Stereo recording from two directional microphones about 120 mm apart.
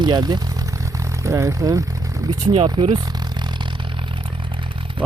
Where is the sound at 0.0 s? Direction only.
35° right (ahead or behind).